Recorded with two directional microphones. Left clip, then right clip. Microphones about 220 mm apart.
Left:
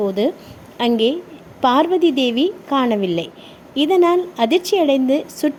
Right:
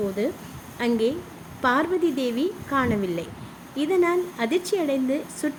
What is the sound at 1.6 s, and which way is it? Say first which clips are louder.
Speech: left 7 dB; 25° left (ahead or behind).